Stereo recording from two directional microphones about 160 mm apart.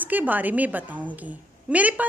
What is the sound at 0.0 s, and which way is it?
Speech, 10° right (ahead or behind).